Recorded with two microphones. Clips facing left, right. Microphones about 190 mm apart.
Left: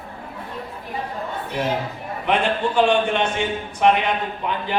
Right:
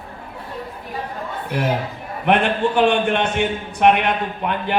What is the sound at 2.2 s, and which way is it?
A man's voice, 60° right (ahead or behind).